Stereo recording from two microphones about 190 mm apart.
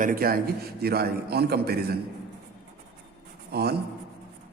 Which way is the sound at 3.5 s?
55° right (ahead or behind).